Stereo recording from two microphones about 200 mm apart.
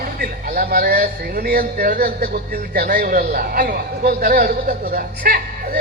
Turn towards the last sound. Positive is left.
turn(degrees=-50)  # may be behind; listen again after turning